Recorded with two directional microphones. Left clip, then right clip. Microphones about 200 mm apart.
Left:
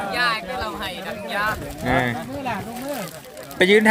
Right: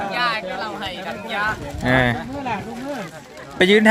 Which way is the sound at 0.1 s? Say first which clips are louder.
Left 2 dB; 25° left (ahead or behind).